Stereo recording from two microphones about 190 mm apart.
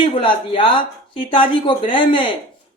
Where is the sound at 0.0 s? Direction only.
25° left (ahead or behind).